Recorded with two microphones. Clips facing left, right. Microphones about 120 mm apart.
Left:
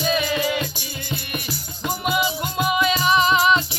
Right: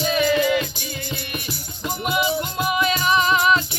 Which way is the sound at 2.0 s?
5° left (ahead or behind).